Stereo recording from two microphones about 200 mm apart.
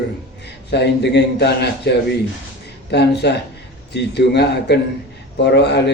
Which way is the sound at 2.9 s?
55° left (ahead or behind).